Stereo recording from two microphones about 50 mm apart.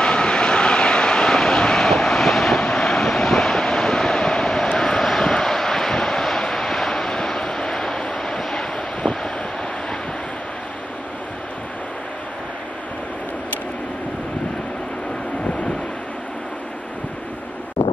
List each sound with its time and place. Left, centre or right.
0.0 s vehicle: centre